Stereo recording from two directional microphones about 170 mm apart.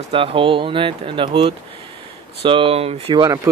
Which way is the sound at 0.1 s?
30° right (ahead or behind).